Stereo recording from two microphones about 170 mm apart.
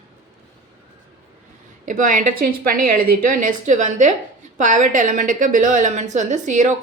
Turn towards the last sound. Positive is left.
turn(degrees=-45)  # may be behind; listen again after turning